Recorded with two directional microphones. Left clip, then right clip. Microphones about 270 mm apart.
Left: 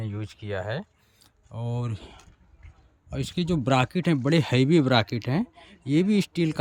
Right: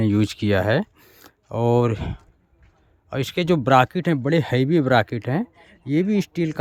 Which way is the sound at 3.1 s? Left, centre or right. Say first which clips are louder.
Right 8 dB; centre.